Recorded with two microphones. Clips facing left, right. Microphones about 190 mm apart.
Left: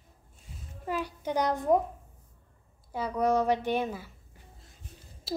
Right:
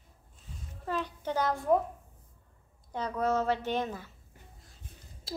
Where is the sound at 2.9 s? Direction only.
10° left (ahead or behind).